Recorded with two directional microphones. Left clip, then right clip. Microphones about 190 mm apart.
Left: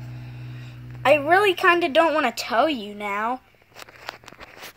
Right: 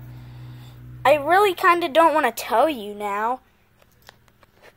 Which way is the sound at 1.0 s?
20° right (ahead or behind).